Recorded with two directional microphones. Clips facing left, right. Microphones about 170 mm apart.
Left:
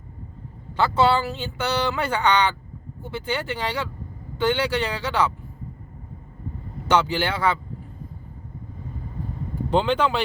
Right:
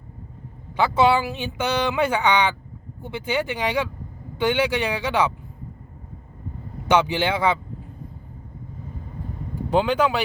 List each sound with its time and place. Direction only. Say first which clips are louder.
0.8 s speech: right 1 dB; 15° right (ahead or behind)
6.8 s speech: right 2 dB; 15° right (ahead or behind)
9.6 s speech: right 1 dB; 10° right (ahead or behind)